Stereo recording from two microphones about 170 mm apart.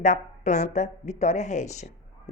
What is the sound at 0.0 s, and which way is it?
Speech, 45° left (ahead or behind).